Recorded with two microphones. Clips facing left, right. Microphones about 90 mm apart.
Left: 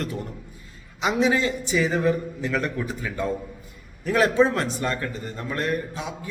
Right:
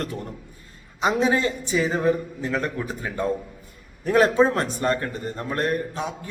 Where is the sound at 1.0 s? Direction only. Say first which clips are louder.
Right 1 dB; 35° right (ahead or behind).